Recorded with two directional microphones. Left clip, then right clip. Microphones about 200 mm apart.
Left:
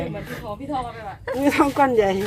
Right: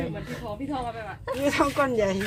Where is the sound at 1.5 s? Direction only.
35° left (ahead or behind).